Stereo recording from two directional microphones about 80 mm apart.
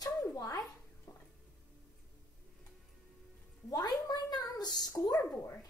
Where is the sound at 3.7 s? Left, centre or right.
Left.